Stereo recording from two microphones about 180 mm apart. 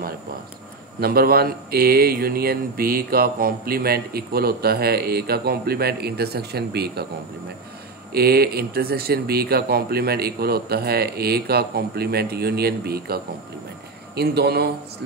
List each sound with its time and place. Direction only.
1.0 s speech: 60° right (ahead or behind)
8.1 s speech: 60° right (ahead or behind)